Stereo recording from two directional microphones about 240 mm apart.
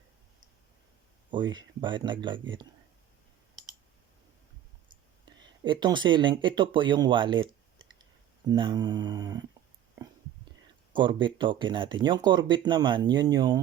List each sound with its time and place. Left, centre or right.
1.3 s speech: centre
5.2 s speech: centre
10.9 s speech: centre